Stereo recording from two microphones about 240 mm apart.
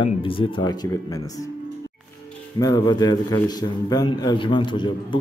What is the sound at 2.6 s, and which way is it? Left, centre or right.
A man's voice, centre.